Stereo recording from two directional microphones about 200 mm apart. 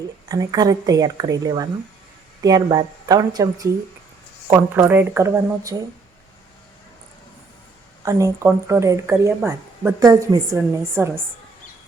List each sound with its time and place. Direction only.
0.3 s a woman's voice: 20° right (ahead or behind)
8.0 s speech: 15° right (ahead or behind)